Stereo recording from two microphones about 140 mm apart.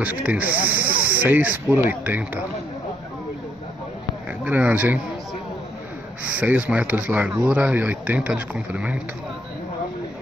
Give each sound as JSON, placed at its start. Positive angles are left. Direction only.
{"t": 0.0, "sound": "speech", "side_deg": -10}
{"t": 4.5, "sound": "speech", "side_deg": -10}
{"t": 6.2, "sound": "speech", "side_deg": -10}